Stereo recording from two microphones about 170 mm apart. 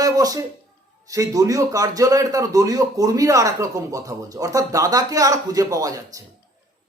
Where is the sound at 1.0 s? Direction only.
20° right (ahead or behind).